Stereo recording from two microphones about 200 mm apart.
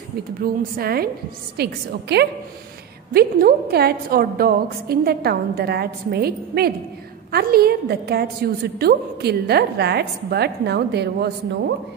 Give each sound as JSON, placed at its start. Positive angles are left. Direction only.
{"t": 0.4, "sound": "a woman's voice", "side_deg": -50}